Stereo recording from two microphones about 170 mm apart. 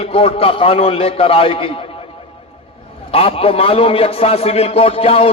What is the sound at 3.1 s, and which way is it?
A man's voice, 35° left (ahead or behind).